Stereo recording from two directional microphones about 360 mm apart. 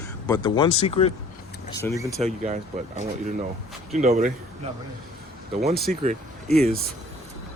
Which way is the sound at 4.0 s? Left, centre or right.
Centre.